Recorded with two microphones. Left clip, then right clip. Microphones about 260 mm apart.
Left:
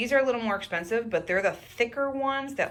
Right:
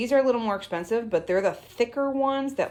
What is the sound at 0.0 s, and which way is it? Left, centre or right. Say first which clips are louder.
Speech: right 2 dB; centre.